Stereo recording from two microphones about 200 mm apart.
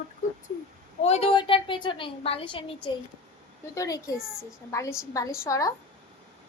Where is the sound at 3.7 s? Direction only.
15° left (ahead or behind).